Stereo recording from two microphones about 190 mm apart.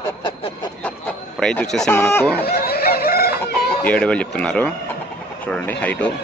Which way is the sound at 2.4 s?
55° left (ahead or behind).